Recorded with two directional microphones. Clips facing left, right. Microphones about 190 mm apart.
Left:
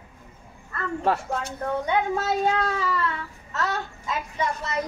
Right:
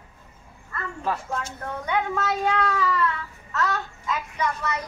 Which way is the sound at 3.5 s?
30° left (ahead or behind).